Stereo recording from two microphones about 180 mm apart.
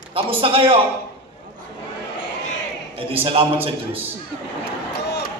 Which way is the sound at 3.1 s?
30° right (ahead or behind).